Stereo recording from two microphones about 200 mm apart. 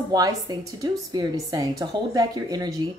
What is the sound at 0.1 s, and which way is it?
Speech, 15° right (ahead or behind).